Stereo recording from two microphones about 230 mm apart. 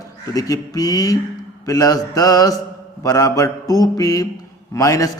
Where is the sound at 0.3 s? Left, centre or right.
Centre.